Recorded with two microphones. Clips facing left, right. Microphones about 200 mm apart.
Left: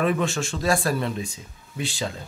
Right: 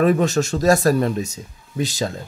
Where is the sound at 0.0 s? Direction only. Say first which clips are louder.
Right 7 dB; 40° right (ahead or behind).